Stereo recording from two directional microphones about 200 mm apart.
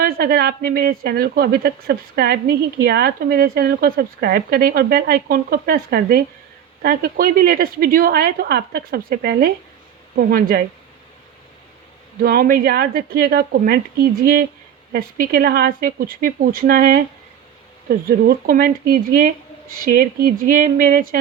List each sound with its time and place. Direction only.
0.0 s a woman's voice: 50° right (ahead or behind)
12.2 s a woman's voice: 45° right (ahead or behind)